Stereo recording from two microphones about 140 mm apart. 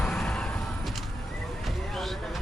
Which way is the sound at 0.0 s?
5° left (ahead or behind).